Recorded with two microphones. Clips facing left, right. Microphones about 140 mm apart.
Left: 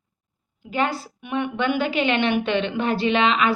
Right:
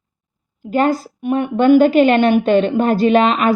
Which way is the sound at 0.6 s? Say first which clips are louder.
Right 8 dB; 45° right (ahead or behind).